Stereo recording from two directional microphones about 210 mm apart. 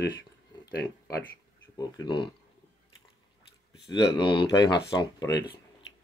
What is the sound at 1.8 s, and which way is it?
Speech, 20° left (ahead or behind).